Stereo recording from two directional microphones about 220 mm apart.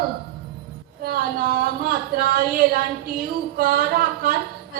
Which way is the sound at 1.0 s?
40° right (ahead or behind).